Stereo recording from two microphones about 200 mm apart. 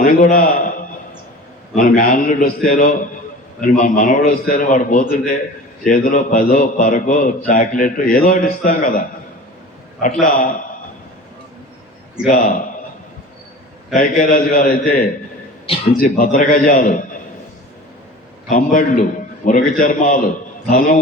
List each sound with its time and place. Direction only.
0.0 s a man's voice: 40° left (ahead or behind)
1.7 s a man's voice: 45° left (ahead or behind)
12.3 s a man's voice: 45° left (ahead or behind)
13.9 s a man's voice: 40° left (ahead or behind)
16.0 s a man's voice: 40° left (ahead or behind)
18.4 s a man's voice: 40° left (ahead or behind)